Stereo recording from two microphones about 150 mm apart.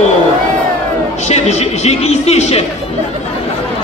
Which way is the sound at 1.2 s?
50° left (ahead or behind).